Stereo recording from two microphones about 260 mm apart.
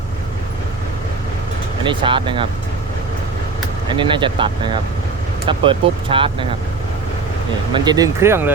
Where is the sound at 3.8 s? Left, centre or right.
Centre.